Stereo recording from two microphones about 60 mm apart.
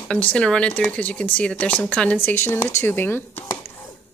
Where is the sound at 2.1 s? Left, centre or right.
Left.